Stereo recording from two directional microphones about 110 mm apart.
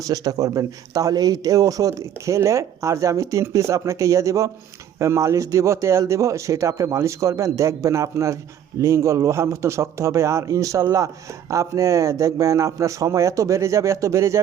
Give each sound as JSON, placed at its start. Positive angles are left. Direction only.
{"t": 0.0, "sound": "speech", "side_deg": -35}